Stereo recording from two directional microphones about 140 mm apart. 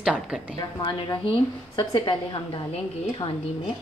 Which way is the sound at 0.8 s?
35° left (ahead or behind).